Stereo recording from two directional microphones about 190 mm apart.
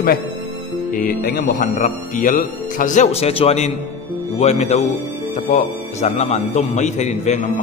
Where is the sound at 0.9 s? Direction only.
55° left (ahead or behind).